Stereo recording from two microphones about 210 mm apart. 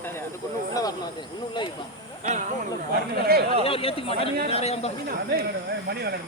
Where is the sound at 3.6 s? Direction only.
25° left (ahead or behind).